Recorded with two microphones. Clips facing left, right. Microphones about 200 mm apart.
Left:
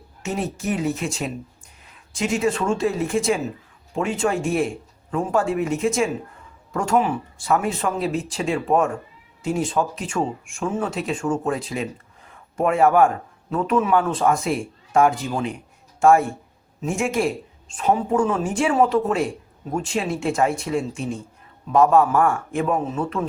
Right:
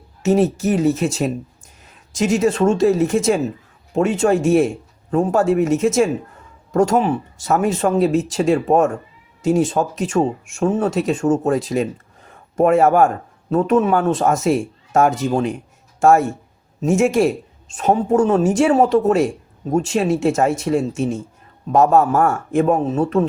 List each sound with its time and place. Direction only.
0.2 s speech: 40° right (ahead or behind)